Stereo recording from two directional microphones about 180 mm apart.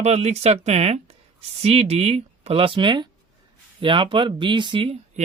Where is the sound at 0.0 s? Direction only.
35° right (ahead or behind).